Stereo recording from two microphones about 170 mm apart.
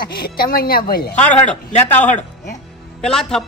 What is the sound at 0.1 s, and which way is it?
A woman's voice, 65° left (ahead or behind).